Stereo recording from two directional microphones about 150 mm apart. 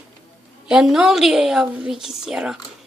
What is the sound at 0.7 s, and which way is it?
A woman's voice, 5° right (ahead or behind).